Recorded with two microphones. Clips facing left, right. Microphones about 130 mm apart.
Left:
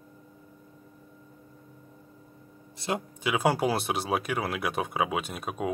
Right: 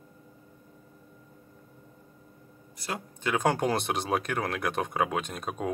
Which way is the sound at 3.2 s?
10° left (ahead or behind).